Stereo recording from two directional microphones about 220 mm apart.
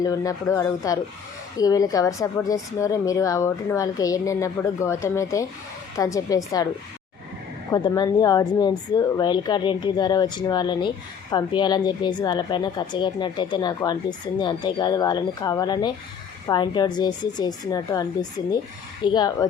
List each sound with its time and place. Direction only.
0.0 s a woman's voice: 15° left (ahead or behind)
7.7 s a woman's voice: 20° left (ahead or behind)